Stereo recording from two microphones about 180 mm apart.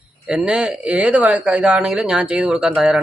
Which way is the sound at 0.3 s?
5° right (ahead or behind).